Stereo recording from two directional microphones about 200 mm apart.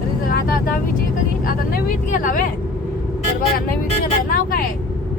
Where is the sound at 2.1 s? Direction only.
40° left (ahead or behind).